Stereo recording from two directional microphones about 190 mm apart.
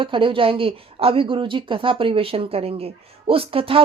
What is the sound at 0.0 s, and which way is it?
A woman's voice, 25° right (ahead or behind).